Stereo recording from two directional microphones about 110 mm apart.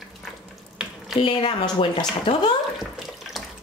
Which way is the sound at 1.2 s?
55° left (ahead or behind).